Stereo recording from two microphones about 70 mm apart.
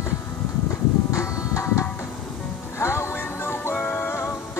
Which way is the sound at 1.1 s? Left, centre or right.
Left.